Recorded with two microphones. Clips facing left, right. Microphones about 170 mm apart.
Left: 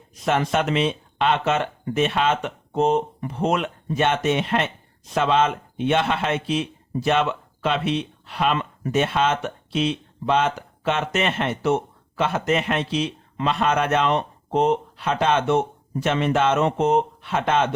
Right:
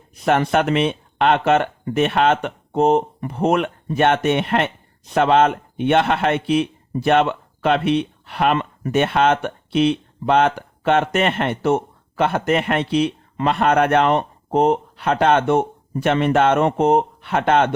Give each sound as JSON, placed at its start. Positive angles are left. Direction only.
{"t": 0.3, "sound": "speech", "side_deg": -60}